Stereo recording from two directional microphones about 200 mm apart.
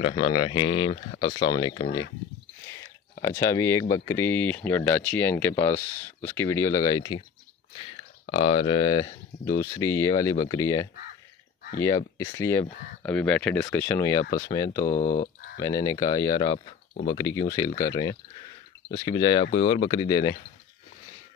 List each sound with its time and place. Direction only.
0.0 s speech: 25° left (ahead or behind)
2.7 s a sound: 15° left (ahead or behind)
3.9 s speech: 15° left (ahead or behind)
8.3 s speech: 30° left (ahead or behind)
12.2 s speech: 15° left (ahead or behind)
16.5 s speech: 40° left (ahead or behind)
17.0 s speech: 20° left (ahead or behind)